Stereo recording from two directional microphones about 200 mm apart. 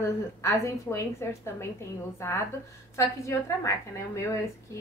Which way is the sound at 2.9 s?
15° left (ahead or behind).